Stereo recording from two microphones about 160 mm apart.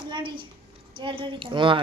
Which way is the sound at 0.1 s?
30° right (ahead or behind).